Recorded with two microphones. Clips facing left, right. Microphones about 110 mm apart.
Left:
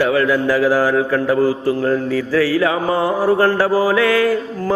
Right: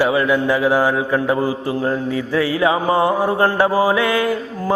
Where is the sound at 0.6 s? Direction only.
25° right (ahead or behind).